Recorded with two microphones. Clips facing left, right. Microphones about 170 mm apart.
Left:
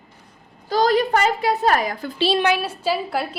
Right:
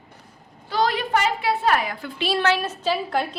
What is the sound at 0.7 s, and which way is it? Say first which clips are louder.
A woman's voice: left 4 dB; 40° left (ahead or behind).